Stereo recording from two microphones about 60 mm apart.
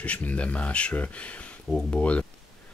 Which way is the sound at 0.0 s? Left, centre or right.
Left.